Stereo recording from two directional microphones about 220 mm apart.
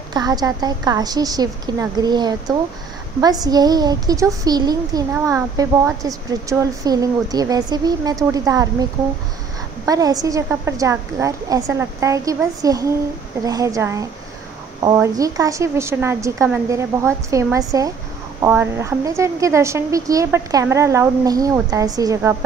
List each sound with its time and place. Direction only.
0.1 s a woman's voice: 15° right (ahead or behind)
9.8 s a woman's voice: 15° right (ahead or behind)